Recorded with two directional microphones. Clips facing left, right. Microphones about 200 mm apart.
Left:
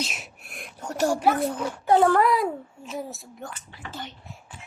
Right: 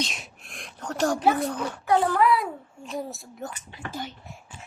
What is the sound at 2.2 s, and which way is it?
Speech, 40° left (ahead or behind).